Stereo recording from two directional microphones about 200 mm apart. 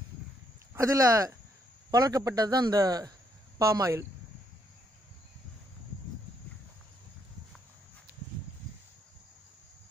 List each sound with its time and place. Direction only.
0.7 s a man's voice: 15° right (ahead or behind)